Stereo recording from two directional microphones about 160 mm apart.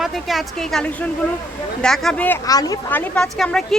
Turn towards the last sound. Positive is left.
turn(degrees=5)  # may be behind; listen again after turning